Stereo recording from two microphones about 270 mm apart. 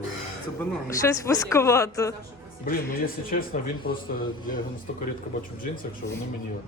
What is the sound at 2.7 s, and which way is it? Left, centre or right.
Speech, left.